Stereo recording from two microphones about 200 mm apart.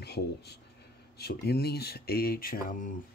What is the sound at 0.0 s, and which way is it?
Speech, 55° left (ahead or behind).